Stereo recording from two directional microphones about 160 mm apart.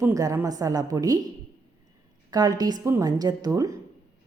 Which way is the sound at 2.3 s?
25° right (ahead or behind).